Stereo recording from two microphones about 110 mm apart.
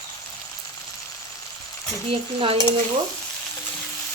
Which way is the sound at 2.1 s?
55° right (ahead or behind).